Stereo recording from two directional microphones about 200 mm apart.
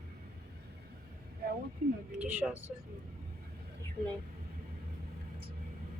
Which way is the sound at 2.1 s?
10° right (ahead or behind).